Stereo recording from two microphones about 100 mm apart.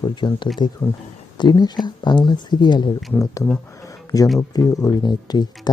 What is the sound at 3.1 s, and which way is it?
Speech, 30° left (ahead or behind).